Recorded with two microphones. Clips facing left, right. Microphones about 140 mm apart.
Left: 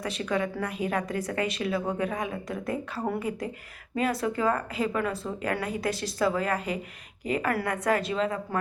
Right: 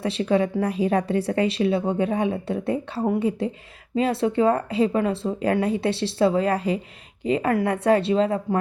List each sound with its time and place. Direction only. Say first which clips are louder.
0.0 s speech: right 7 dB; 30° right (ahead or behind)